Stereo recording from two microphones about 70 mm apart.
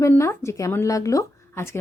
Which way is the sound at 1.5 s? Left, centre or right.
Left.